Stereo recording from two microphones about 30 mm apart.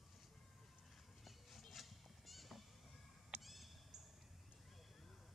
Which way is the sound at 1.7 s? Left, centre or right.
Centre.